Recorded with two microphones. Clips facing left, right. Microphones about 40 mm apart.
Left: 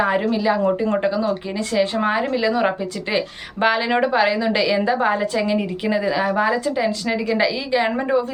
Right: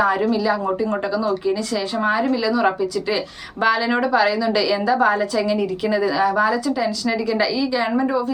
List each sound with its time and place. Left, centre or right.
0.0 s a woman's voice: left